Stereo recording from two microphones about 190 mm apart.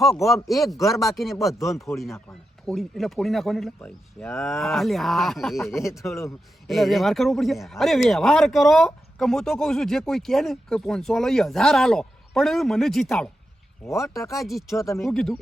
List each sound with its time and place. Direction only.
0.4 s speech: centre (ahead or behind)
2.6 s speech: centre (ahead or behind)
4.4 s speech: centre (ahead or behind)
5.7 s speech: 15° left (ahead or behind)
6.7 s speech: centre (ahead or behind)
14.1 s speech: 15° left (ahead or behind)
14.9 s speech: centre (ahead or behind)